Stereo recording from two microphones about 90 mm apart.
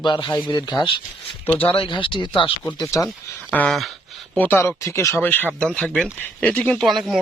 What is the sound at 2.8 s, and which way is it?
Speech, 35° left (ahead or behind).